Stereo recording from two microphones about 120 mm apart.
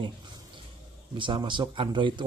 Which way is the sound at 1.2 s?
40° right (ahead or behind).